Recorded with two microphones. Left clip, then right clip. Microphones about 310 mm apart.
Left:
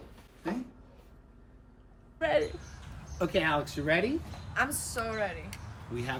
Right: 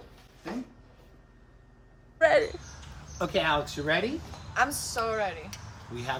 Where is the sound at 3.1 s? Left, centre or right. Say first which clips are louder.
Right 2 dB; centre.